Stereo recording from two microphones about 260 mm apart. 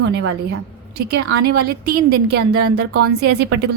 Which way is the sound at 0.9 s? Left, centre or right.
Right.